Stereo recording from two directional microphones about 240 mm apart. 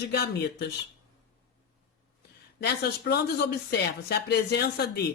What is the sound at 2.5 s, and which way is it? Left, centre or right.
Speech, left.